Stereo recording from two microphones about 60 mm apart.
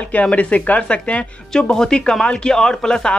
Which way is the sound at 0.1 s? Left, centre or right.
Left.